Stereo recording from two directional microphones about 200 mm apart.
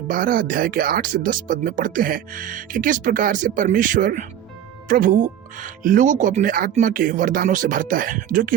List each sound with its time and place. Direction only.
0.1 s speech: 45° right (ahead or behind)